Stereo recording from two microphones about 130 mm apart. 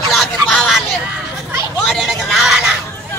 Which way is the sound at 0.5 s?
Centre (ahead or behind).